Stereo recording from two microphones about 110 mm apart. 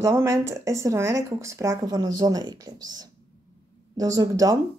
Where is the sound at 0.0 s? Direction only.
25° right (ahead or behind).